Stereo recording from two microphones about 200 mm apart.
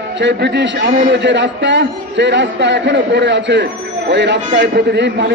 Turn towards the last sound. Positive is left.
turn(degrees=-55)  # may be behind; listen again after turning